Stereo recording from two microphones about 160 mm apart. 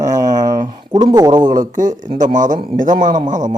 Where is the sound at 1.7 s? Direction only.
55° right (ahead or behind).